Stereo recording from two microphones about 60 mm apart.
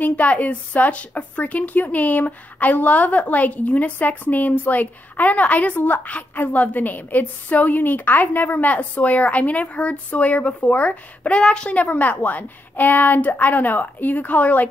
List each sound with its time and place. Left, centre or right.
0.0 s a woman's voice: left